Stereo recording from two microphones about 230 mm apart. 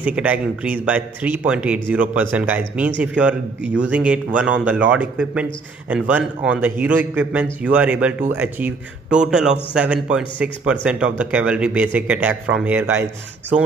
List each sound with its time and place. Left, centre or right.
0.0 s speech: centre
3.6 s a man's voice: right
3.9 s speech: centre